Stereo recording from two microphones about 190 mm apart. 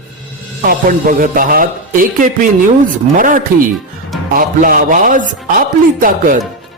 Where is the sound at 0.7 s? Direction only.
45° right (ahead or behind).